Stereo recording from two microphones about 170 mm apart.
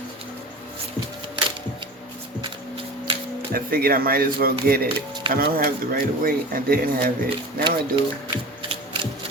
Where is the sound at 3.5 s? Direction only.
60° right (ahead or behind).